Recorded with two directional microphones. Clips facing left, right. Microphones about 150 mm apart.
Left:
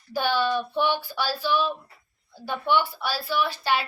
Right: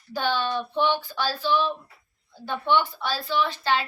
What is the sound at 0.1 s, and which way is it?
Speech, 10° left (ahead or behind).